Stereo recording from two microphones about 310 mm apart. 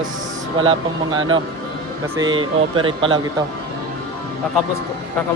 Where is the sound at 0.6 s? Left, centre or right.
Centre.